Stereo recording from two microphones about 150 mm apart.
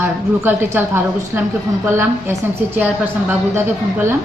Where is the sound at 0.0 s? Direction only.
15° right (ahead or behind).